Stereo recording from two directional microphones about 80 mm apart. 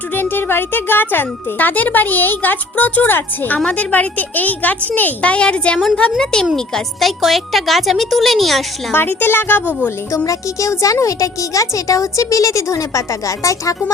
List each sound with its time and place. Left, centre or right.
0.1 s speech: left; by 8.6 s centre
8.9 s speech: left
10.2 s speech: left